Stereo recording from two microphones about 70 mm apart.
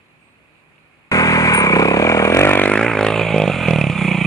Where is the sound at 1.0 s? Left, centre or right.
Left.